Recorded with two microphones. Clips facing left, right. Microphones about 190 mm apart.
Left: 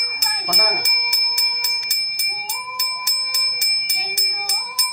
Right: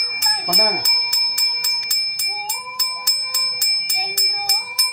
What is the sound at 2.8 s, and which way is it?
Music, 20° left (ahead or behind).